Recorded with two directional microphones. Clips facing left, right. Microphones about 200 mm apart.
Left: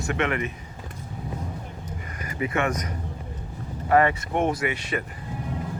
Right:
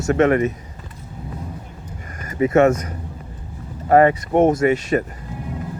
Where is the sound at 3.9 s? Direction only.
40° right (ahead or behind).